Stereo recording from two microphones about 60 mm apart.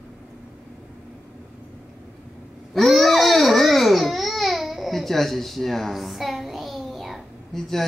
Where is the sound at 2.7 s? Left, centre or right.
Centre.